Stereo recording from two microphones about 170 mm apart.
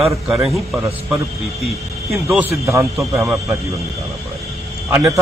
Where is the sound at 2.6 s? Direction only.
15° right (ahead or behind).